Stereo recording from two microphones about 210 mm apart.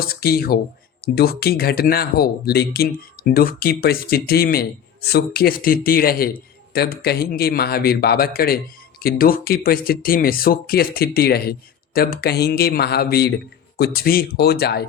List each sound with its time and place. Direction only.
0.0 s speech: 45° left (ahead or behind)